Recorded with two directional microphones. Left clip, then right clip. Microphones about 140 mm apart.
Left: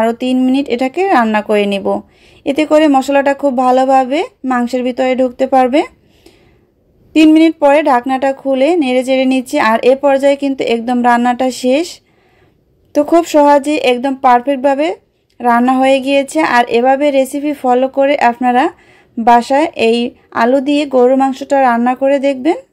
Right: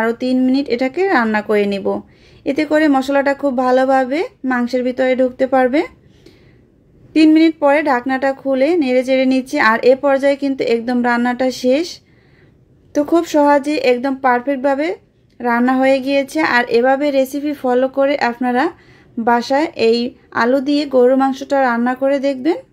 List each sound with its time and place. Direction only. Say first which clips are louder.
0.0 s speech: left 3 dB; 40° left (ahead or behind)